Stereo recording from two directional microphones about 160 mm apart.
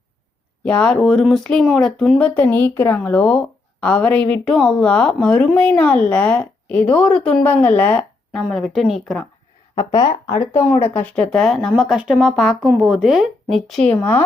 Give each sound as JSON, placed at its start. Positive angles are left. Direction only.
{"t": 0.6, "sound": "speech", "side_deg": 5}
{"t": 9.7, "sound": "speech", "side_deg": 20}